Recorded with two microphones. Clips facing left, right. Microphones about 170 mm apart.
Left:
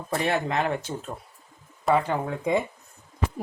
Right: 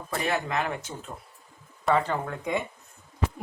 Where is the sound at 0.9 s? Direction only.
45° left (ahead or behind).